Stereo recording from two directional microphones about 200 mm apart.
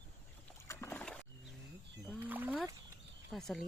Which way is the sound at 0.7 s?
10° left (ahead or behind).